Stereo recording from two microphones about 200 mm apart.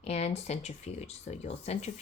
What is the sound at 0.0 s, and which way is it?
Speech, 30° left (ahead or behind).